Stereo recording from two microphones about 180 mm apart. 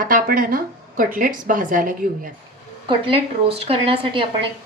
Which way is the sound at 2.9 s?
30° right (ahead or behind).